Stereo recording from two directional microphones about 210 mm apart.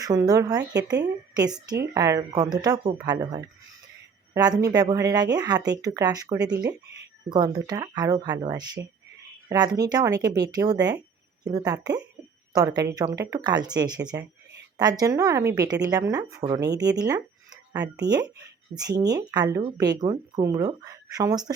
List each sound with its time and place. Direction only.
0.0 s speech: 15° right (ahead or behind)
1.8 s speech: 15° right (ahead or behind)